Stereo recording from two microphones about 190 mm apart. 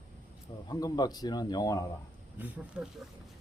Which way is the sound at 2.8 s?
5° right (ahead or behind).